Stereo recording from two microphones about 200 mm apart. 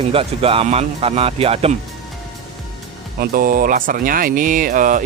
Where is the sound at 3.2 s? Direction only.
45° right (ahead or behind).